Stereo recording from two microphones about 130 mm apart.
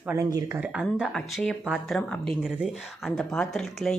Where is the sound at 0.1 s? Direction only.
25° right (ahead or behind).